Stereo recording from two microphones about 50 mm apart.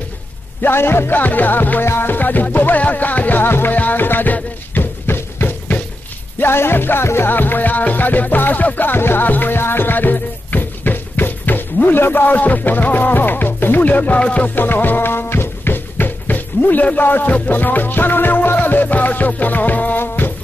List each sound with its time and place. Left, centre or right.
0.6 s music: left
14.5 s music: left